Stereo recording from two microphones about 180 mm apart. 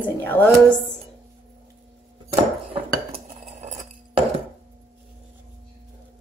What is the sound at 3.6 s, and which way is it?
Chink, 40° right (ahead or behind).